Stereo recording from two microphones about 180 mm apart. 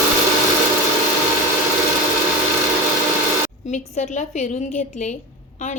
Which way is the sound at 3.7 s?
40° left (ahead or behind).